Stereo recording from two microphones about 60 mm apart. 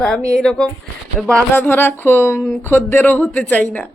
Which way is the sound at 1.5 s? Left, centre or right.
Left.